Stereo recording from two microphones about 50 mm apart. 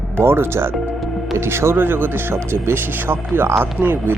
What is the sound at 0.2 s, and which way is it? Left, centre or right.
Speech, right.